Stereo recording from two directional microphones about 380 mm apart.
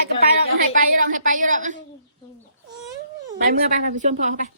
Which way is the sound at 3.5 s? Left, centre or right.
Centre.